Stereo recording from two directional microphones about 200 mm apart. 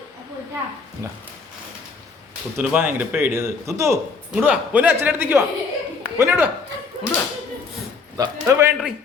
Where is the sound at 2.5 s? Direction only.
10° right (ahead or behind).